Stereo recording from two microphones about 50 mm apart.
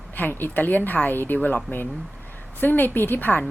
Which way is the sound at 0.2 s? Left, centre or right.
Left.